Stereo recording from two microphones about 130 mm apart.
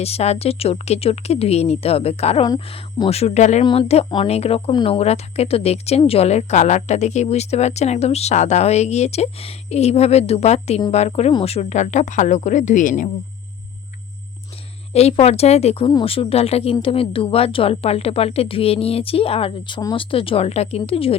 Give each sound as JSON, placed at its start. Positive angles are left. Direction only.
{"t": 0.0, "sound": "speech", "side_deg": 55}
{"t": 3.6, "sound": "speech", "side_deg": 40}
{"t": 4.3, "sound": "speech", "side_deg": 50}
{"t": 14.9, "sound": "speech", "side_deg": 50}